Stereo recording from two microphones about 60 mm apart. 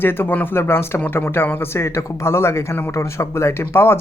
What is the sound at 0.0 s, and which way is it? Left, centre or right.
Speech, left.